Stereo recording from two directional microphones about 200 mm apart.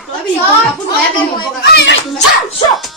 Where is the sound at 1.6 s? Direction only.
55° left (ahead or behind).